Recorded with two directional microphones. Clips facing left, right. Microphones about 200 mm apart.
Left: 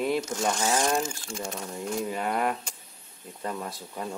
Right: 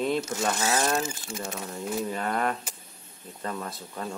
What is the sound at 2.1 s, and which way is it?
Speech, 10° left (ahead or behind).